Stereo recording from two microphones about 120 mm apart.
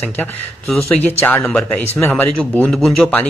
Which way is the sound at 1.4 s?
5° left (ahead or behind).